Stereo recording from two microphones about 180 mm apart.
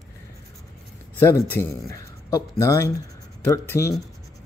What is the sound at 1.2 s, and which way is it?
A man's voice, 15° left (ahead or behind).